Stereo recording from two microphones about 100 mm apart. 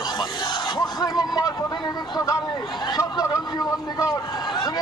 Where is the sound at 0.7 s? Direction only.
40° left (ahead or behind).